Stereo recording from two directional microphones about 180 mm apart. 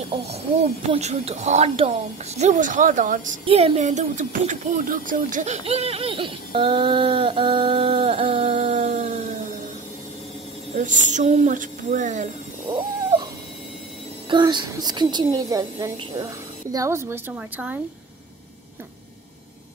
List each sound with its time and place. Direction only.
0.3 s speech: 40° right (ahead or behind)
3.4 s speech: 35° right (ahead or behind)
10.7 s a woman's voice: 45° right (ahead or behind)
12.7 s cat: 30° right (ahead or behind)
14.3 s a woman's voice: 25° right (ahead or behind); by 17.7 s 10° right (ahead or behind)